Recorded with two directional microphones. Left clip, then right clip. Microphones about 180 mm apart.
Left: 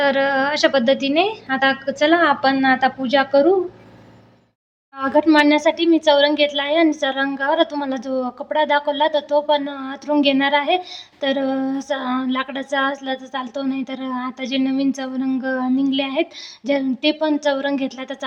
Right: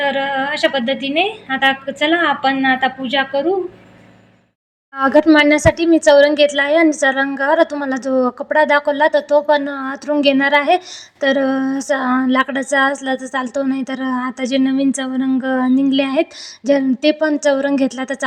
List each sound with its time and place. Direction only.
0.0 s a woman's voice: 10° left (ahead or behind)
4.9 s a woman's voice: 30° right (ahead or behind)